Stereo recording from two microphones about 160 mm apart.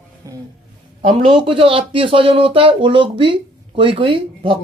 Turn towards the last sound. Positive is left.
turn(degrees=-30)  # may be behind; listen again after turning